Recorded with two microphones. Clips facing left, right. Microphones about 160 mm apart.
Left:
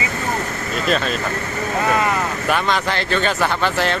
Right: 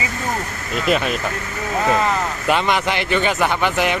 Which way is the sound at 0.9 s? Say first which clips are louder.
Right 2 dB; 15° right (ahead or behind).